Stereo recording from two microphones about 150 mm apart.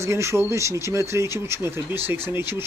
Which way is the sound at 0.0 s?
20° right (ahead or behind).